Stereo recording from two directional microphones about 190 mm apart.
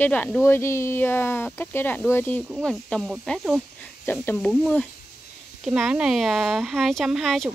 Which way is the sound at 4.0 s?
10° left (ahead or behind).